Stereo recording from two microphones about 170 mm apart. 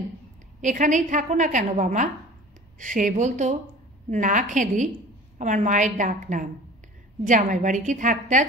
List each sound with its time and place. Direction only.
0.6 s a woman's voice: 45° right (ahead or behind)